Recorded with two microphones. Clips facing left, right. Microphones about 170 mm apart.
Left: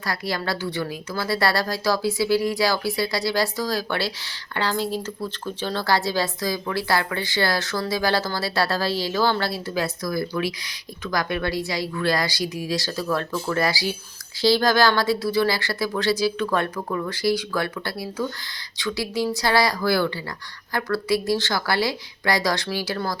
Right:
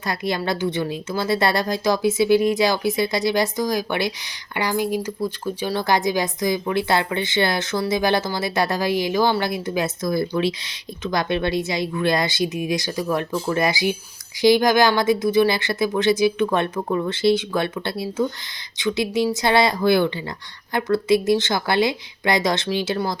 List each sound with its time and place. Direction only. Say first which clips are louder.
0.0 s a woman's voice: right 3 dB; 20° right (ahead or behind)